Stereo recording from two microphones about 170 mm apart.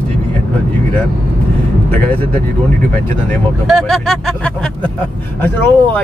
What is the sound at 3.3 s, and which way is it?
Speech, centre (ahead or behind).